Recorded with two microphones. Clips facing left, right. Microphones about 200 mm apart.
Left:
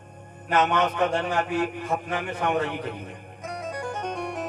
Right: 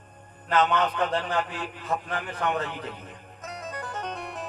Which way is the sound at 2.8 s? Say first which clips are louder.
Left 5 dB; 10° left (ahead or behind).